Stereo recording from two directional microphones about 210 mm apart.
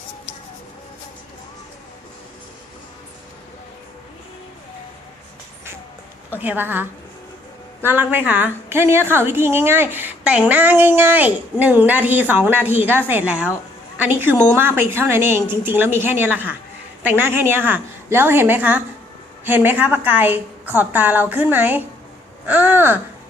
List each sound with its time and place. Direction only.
6.3 s a woman's voice: 10° right (ahead or behind)
7.9 s a woman's voice: 10° right (ahead or behind)